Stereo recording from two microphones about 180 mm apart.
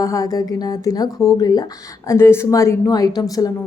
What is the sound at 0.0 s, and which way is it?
A woman's voice, 20° left (ahead or behind).